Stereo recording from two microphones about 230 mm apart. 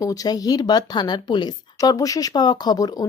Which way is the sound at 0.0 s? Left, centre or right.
Centre.